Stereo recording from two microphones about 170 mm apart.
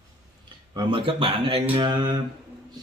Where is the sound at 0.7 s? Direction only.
30° right (ahead or behind).